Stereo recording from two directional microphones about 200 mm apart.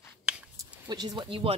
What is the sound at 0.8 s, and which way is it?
Speech, 20° right (ahead or behind).